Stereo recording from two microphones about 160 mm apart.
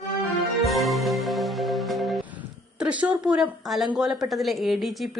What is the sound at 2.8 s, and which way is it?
A woman's voice, 5° right (ahead or behind).